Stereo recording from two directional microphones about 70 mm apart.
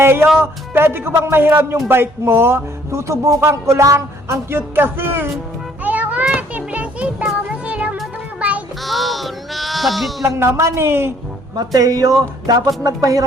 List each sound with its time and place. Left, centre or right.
0.0 s speech: right
5.8 s music: right
8.4 s child singing: right
8.8 s speech: centre
10.2 s speech: right
11.5 s speech: right